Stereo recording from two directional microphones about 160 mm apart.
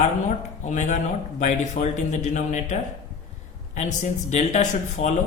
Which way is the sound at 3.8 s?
50° left (ahead or behind).